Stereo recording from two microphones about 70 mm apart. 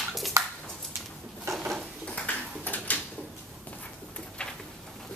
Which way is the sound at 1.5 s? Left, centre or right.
Right.